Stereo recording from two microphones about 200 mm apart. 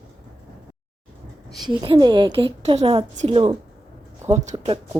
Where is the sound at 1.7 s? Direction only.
25° right (ahead or behind).